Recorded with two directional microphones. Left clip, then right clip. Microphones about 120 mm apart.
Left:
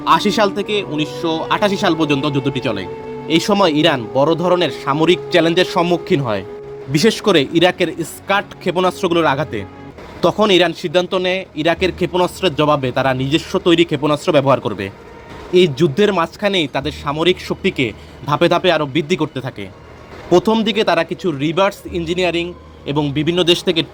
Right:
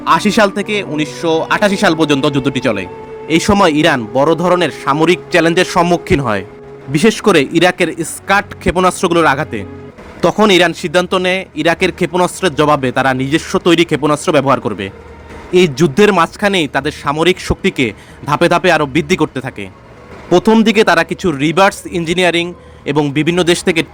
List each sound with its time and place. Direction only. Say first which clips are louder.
0.0 s speech: right 3 dB; 25° right (ahead or behind)
15.5 s a man's voice: right 3 dB; 30° right (ahead or behind)